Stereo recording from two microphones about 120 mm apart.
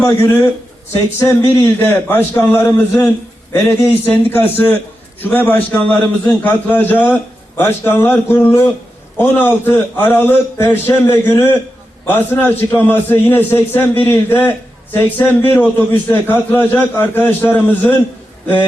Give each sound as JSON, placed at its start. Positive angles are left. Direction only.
{"t": 1.2, "sound": "a man's voice", "side_deg": 25}